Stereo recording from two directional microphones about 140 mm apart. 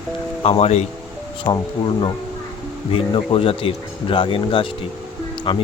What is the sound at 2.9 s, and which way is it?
Speech, 40° left (ahead or behind).